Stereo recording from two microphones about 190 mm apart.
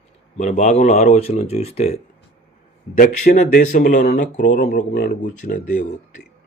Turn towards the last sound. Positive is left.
turn(degrees=45)  # may be behind; listen again after turning